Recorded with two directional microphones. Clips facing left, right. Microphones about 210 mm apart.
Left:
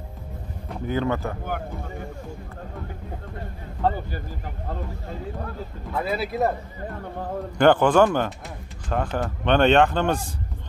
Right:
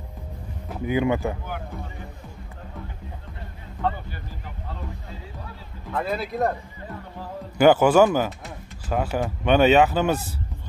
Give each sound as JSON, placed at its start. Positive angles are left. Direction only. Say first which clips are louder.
{"t": 0.7, "sound": "a man's voice", "louder": "right 2 dB", "side_deg": -10}
{"t": 3.8, "sound": "speech", "louder": "left 3 dB", "side_deg": 40}
{"t": 5.9, "sound": "speech", "louder": "left 1 dB", "side_deg": 5}
{"t": 7.5, "sound": "a man's voice", "louder": "right 1 dB", "side_deg": -5}